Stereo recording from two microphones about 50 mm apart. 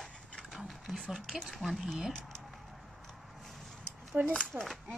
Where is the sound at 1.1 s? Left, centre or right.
Centre.